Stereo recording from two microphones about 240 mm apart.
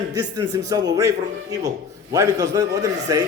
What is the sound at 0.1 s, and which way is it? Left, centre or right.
Speech, centre.